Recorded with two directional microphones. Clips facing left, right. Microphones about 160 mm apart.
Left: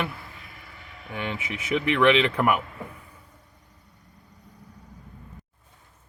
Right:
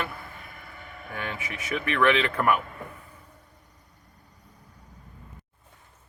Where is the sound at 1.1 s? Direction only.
20° left (ahead or behind).